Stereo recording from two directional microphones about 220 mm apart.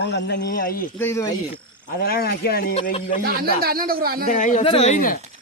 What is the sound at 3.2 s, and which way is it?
Speech, 45° right (ahead or behind).